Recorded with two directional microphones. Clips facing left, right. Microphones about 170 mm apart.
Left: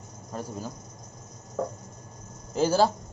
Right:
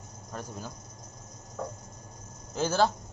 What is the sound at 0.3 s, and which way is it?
Speech, 5° left (ahead or behind).